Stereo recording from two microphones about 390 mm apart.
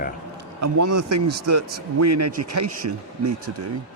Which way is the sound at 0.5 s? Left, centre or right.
Right.